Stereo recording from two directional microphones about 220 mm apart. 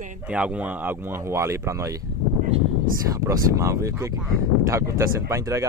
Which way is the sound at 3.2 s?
15° right (ahead or behind).